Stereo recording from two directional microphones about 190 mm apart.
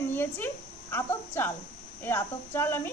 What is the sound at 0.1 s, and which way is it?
Speech, 10° left (ahead or behind).